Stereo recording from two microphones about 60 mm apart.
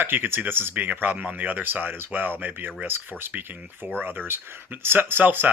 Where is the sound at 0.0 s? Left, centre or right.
Right.